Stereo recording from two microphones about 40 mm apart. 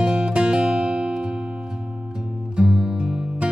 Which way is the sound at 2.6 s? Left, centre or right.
Right.